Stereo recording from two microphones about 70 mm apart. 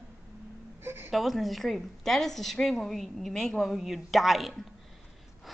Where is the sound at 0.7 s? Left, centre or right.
Right.